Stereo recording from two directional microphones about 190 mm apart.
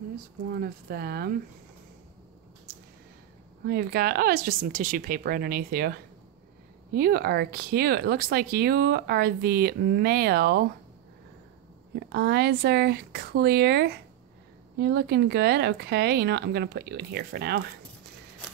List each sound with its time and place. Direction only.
0.5 s speech: 55° right (ahead or behind)
3.6 s speech: 55° right (ahead or behind)
11.9 s speech: 60° right (ahead or behind)